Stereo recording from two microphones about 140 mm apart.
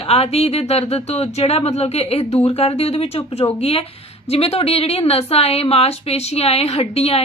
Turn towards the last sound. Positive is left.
turn(degrees=45)  # may be behind; listen again after turning